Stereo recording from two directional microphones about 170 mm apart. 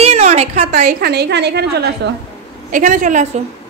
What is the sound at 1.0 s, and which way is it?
A woman's voice, 75° right (ahead or behind).